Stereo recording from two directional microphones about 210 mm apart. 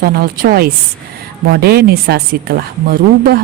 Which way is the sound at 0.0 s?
45° right (ahead or behind).